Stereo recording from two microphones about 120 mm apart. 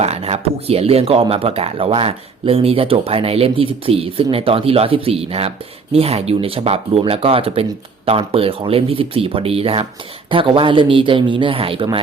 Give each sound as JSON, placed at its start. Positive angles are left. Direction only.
{"t": 0.0, "sound": "speech", "side_deg": -60}